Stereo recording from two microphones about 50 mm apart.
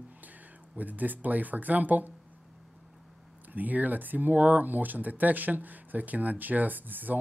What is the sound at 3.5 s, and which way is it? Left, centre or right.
Speech, right.